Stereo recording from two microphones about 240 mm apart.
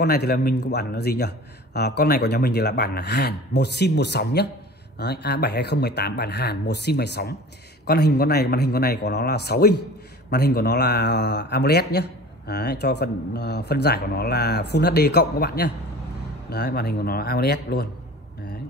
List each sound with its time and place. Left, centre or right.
0.0 s speech: left